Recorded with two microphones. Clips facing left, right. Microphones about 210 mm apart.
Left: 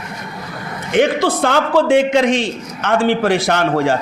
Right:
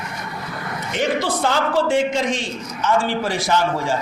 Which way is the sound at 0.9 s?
60° left (ahead or behind).